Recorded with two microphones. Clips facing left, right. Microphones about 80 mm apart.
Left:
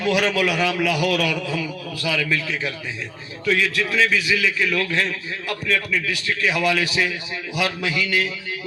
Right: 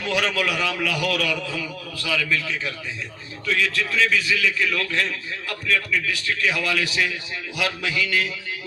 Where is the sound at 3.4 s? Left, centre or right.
Left.